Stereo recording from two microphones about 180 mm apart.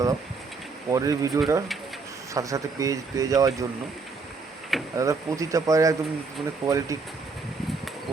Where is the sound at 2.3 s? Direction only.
20° right (ahead or behind).